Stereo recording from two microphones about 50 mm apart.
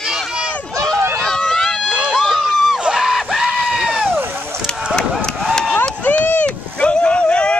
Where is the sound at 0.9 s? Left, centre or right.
Right.